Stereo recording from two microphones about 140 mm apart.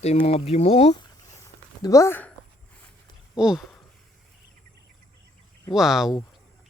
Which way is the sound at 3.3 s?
5° right (ahead or behind).